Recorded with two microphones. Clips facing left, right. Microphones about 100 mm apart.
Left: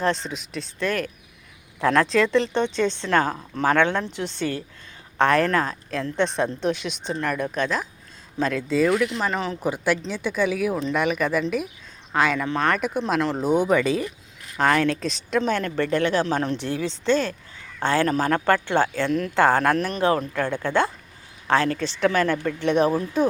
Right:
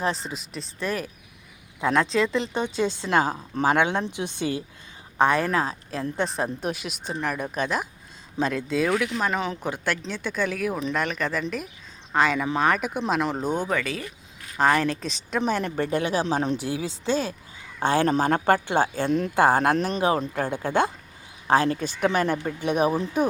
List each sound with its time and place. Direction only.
0.0 s speech: 5° right (ahead or behind)
13.4 s speech: 10° left (ahead or behind)
14.5 s speech: 5° right (ahead or behind)
15.4 s speech: 15° right (ahead or behind)
21.4 s speech: 15° right (ahead or behind)